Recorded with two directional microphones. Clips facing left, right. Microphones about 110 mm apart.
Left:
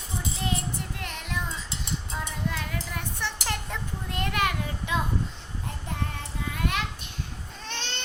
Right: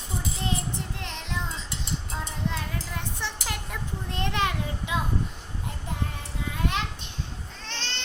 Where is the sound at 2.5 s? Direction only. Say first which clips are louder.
Even; 20° right (ahead or behind).